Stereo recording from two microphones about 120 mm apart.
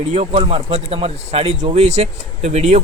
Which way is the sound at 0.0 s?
60° right (ahead or behind).